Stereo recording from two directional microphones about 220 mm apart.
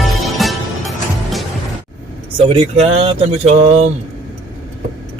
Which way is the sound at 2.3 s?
25° right (ahead or behind).